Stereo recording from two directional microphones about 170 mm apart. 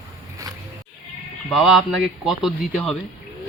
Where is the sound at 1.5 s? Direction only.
Centre (ahead or behind).